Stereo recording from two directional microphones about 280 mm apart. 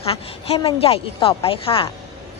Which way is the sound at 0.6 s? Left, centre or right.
Left.